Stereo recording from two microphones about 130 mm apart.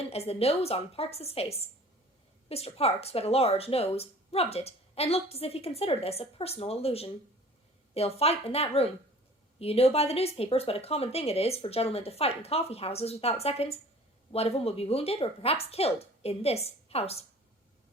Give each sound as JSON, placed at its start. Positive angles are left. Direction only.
{"t": 0.1, "sound": "speech", "side_deg": 50}
{"t": 8.2, "sound": "speech", "side_deg": 50}